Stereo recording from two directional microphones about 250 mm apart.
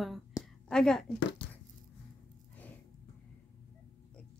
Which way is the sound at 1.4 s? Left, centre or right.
Left.